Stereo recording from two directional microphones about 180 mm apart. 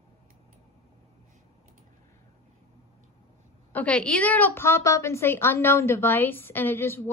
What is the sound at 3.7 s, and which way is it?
A woman's voice, 5° left (ahead or behind).